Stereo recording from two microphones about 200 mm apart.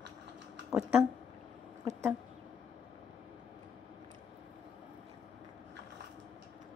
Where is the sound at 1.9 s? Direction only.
15° right (ahead or behind).